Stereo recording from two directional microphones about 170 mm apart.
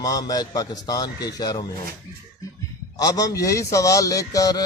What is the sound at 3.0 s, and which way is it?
Speech, 20° left (ahead or behind).